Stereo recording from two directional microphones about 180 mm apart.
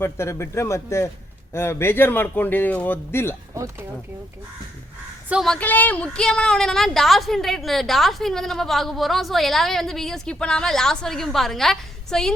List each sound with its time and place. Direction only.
0.0 s speech: 15° left (ahead or behind)
3.5 s speech: 15° right (ahead or behind)
5.3 s a woman's voice: centre (ahead or behind)